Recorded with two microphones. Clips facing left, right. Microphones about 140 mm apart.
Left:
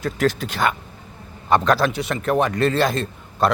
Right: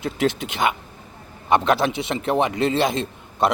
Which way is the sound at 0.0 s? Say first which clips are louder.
Left 1 dB; 20° right (ahead or behind).